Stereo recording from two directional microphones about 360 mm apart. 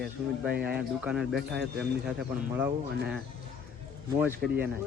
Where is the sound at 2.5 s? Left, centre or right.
Centre.